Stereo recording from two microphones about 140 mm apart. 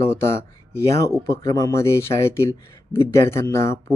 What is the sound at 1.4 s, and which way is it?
Speech, 25° left (ahead or behind).